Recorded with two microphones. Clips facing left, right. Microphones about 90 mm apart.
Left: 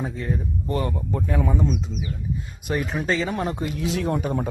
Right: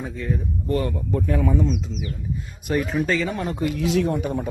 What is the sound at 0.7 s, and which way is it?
Speech, 20° left (ahead or behind).